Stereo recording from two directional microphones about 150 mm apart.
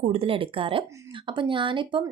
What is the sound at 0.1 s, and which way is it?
Speech, 40° right (ahead or behind).